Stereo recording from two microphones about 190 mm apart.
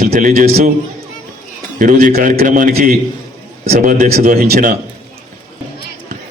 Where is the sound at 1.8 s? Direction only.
45° right (ahead or behind).